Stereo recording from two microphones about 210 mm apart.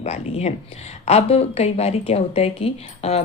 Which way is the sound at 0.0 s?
30° left (ahead or behind).